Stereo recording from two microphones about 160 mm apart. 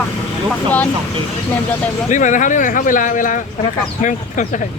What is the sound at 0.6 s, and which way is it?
Speech, 10° left (ahead or behind).